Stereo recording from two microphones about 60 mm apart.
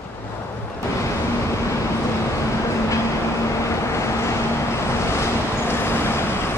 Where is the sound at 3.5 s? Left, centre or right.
Left.